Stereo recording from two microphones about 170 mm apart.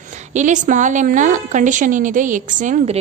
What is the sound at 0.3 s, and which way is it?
A woman's voice, 45° right (ahead or behind).